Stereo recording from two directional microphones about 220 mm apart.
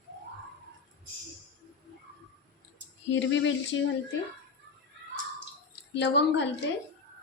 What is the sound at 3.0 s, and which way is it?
Speech, 55° left (ahead or behind).